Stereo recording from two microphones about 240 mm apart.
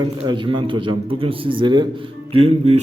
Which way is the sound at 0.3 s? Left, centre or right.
Centre.